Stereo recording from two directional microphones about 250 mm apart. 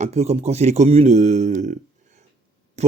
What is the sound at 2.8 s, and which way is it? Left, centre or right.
Speech, right.